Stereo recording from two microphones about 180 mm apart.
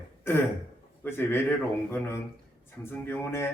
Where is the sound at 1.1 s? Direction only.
15° left (ahead or behind).